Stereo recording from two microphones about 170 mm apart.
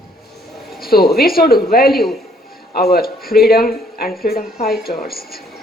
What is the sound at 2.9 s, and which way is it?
A woman's voice, 60° left (ahead or behind).